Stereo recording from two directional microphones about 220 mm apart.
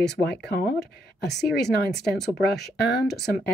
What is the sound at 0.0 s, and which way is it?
A woman's voice, 50° left (ahead or behind).